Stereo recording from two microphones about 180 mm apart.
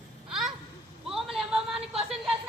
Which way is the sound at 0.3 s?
Centre (ahead or behind).